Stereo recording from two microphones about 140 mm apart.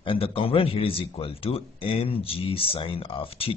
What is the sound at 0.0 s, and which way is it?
Speech, 40° left (ahead or behind).